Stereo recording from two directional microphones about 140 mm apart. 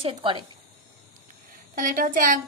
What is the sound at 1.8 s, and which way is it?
Speech, 75° right (ahead or behind).